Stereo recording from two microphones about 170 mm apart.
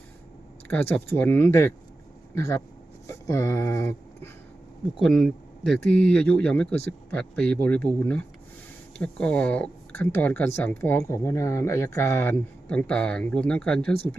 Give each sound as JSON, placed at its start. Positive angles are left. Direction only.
{"t": 0.7, "sound": "speech", "side_deg": 10}
{"t": 5.0, "sound": "speech", "side_deg": 0}